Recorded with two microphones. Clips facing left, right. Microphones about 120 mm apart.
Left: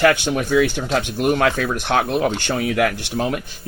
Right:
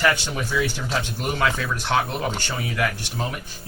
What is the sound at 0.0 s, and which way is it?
Speech, 60° left (ahead or behind).